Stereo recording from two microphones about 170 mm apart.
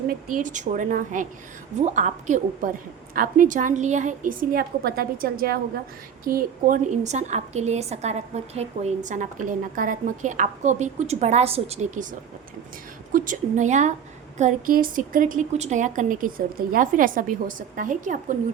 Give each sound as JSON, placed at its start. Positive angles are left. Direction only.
{"t": 0.1, "sound": "a woman's voice", "side_deg": -55}
{"t": 13.1, "sound": "a woman's voice", "side_deg": -50}